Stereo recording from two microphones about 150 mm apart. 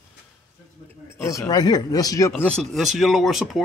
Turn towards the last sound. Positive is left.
turn(degrees=0)  # may be behind; listen again after turning